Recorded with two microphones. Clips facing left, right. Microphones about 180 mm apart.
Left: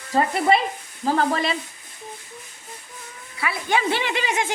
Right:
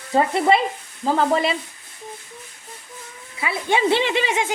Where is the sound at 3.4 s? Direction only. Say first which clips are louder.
Right 3 dB; 25° right (ahead or behind).